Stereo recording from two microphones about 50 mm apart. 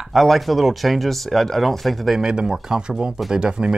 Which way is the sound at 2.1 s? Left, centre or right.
Centre.